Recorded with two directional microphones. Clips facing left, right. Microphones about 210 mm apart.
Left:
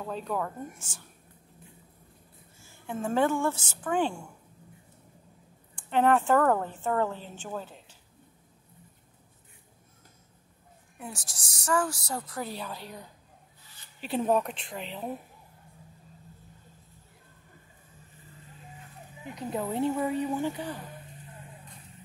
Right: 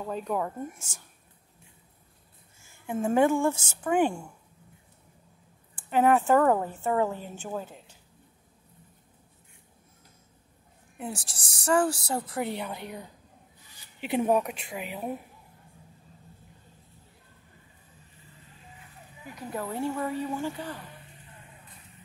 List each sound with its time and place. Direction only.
0.0 s speech: 10° right (ahead or behind)
0.7 s speech: 45° right (ahead or behind)
2.9 s speech: 10° right (ahead or behind)
5.8 s speech: 5° right (ahead or behind)
11.0 s a woman's voice: 25° right (ahead or behind); by 15.0 s 10° right (ahead or behind)
19.2 s speech: 20° left (ahead or behind)